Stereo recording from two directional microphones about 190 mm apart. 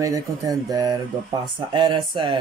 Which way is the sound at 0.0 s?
20° right (ahead or behind).